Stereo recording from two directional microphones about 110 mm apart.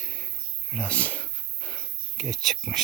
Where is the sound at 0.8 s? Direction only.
10° left (ahead or behind).